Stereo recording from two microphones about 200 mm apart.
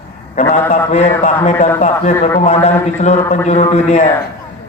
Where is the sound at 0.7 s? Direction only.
35° left (ahead or behind).